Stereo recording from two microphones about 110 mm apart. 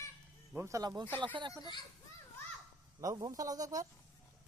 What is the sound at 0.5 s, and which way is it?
Speech, 25° right (ahead or behind).